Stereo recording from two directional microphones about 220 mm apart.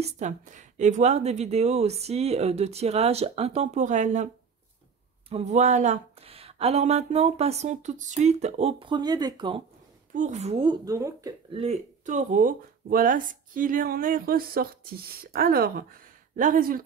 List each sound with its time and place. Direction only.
0.0 s speech: 35° right (ahead or behind)
5.3 s speech: 30° right (ahead or behind)
10.1 s speech: 30° right (ahead or behind); by 11.6 s 15° right (ahead or behind)
11.6 s speech: 30° right (ahead or behind)